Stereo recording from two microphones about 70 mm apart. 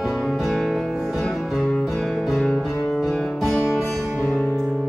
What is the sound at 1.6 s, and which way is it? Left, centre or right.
Music, centre.